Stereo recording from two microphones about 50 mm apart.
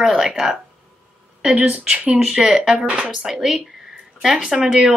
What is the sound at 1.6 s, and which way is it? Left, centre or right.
Speech, right.